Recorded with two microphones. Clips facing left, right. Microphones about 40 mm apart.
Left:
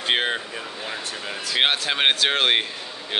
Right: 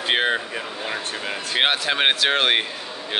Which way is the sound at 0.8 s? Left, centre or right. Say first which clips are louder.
Right 4 dB; right.